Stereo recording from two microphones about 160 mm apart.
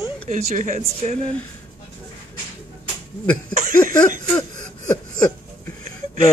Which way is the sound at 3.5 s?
55° right (ahead or behind).